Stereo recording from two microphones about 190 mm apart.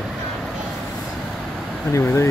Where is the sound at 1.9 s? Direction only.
15° left (ahead or behind).